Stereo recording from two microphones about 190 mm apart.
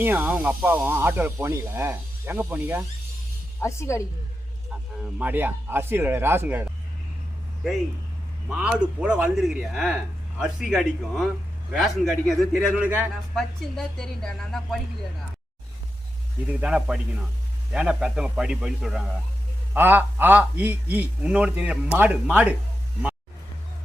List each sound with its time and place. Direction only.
0.0 s speech: 10° right (ahead or behind)
3.6 s speech: 15° left (ahead or behind)
5.1 s speech: 10° right (ahead or behind)
8.4 s speech: 5° right (ahead or behind)
13.3 s speech: centre (ahead or behind)
16.5 s speech: 5° right (ahead or behind)